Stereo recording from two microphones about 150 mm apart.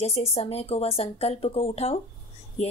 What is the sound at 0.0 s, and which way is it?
A woman's voice, 45° left (ahead or behind).